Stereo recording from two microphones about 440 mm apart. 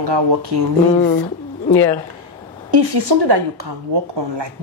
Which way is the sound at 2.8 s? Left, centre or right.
Right.